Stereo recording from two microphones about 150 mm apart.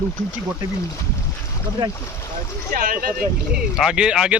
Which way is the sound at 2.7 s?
65° right (ahead or behind).